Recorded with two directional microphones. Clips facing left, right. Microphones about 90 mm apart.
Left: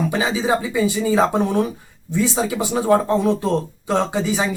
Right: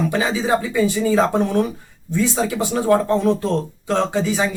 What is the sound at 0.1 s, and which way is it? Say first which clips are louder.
Speech: right 1 dB; 15° left (ahead or behind).